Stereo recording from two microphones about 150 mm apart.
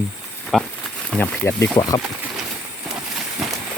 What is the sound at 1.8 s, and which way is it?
Speech, 25° left (ahead or behind).